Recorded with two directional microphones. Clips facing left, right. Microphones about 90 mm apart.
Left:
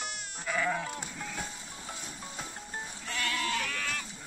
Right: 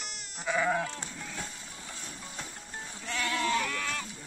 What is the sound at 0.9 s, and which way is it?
Sheep, 10° left (ahead or behind).